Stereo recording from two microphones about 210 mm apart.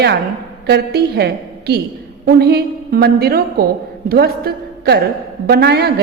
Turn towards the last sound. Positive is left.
turn(degrees=-50)  # may be behind; listen again after turning